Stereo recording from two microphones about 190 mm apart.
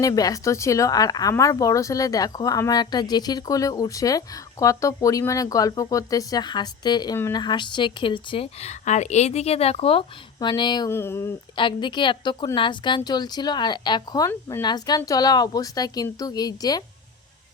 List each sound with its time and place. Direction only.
0.0 s speech: 20° left (ahead or behind)
11.5 s speech: 25° left (ahead or behind)